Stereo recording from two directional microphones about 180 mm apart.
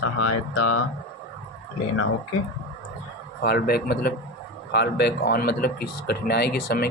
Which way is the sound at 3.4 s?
60° left (ahead or behind).